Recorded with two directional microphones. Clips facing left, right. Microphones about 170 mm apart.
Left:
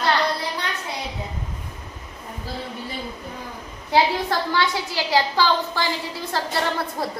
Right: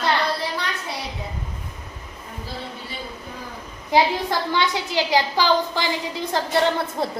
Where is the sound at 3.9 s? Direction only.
20° right (ahead or behind).